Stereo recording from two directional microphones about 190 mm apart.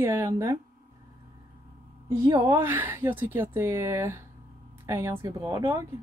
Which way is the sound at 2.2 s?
20° right (ahead or behind).